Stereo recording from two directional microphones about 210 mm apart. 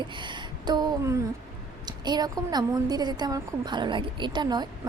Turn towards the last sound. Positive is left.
turn(degrees=-20)  # may be behind; listen again after turning